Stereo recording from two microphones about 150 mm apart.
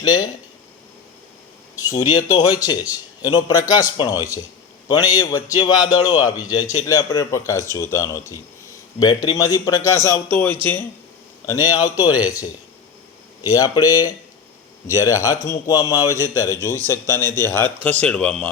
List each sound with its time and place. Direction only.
0.0 s speech: 25° left (ahead or behind)
2.1 s speech: 25° left (ahead or behind)
11.4 s speech: 25° left (ahead or behind); by 18.5 s 5° left (ahead or behind)